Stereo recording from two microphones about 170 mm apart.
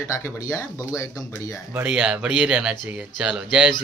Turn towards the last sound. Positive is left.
turn(degrees=-5)  # may be behind; listen again after turning